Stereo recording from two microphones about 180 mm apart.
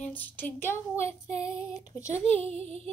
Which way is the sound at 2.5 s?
35° right (ahead or behind).